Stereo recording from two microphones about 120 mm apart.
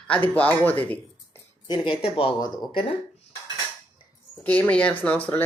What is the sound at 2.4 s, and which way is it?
Speech, 35° left (ahead or behind).